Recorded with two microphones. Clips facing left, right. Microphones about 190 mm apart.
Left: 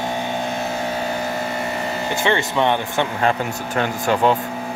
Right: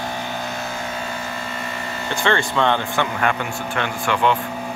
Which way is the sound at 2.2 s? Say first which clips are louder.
Even; 20° left (ahead or behind).